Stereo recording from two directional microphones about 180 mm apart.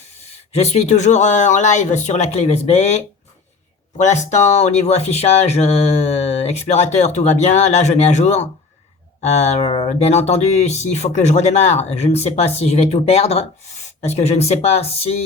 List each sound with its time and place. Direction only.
0.5 s speech: 35° left (ahead or behind)